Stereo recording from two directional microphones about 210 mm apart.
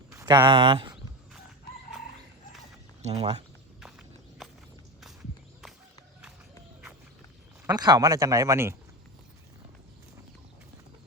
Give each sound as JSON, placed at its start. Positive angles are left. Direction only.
{"t": 0.1, "sound": "speech", "side_deg": -20}
{"t": 3.1, "sound": "speech", "side_deg": -30}
{"t": 3.8, "sound": "walk", "side_deg": 0}
{"t": 7.7, "sound": "speech", "side_deg": -20}